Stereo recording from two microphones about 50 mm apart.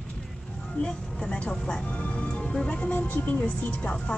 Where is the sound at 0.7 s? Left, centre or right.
Left.